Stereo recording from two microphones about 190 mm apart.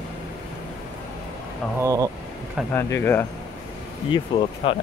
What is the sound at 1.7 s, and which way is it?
Speech, 20° right (ahead or behind).